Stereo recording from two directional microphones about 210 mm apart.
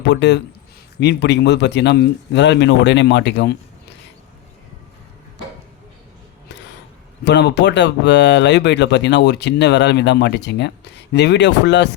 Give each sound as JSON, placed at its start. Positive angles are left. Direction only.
{"t": 0.1, "sound": "speech", "side_deg": 55}
{"t": 7.3, "sound": "speech", "side_deg": 55}